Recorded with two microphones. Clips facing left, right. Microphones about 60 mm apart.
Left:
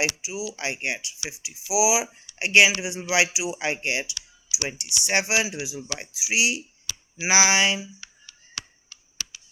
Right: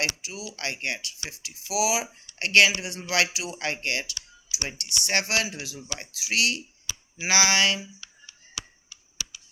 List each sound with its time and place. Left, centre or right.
0.0 s speech: centre